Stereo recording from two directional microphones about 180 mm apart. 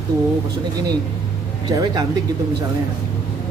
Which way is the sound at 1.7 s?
20° right (ahead or behind).